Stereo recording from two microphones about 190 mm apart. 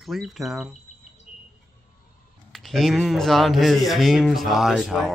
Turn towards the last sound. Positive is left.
turn(degrees=0)  # may be behind; listen again after turning